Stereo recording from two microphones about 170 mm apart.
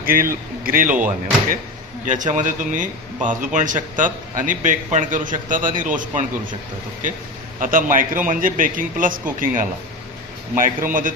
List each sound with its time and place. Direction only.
0.0 s a man's voice: 55° right (ahead or behind)
7.6 s a man's voice: 50° right (ahead or behind)